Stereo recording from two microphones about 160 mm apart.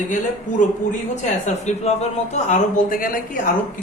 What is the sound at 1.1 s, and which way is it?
A man's voice, 45° left (ahead or behind).